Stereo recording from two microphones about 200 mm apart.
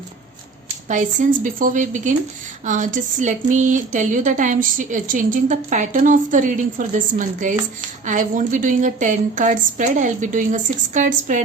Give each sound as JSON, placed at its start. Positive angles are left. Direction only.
{"t": 0.9, "sound": "speech", "side_deg": -40}